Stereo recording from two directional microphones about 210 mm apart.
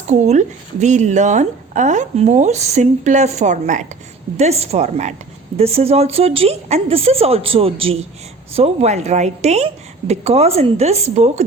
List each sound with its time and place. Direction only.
0.1 s a woman's voice: 35° right (ahead or behind)